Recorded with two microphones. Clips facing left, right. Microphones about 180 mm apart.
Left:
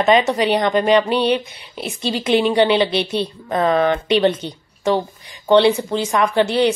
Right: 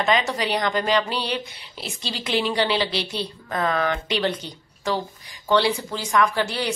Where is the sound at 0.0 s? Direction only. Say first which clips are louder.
Left 7 dB; 20° left (ahead or behind).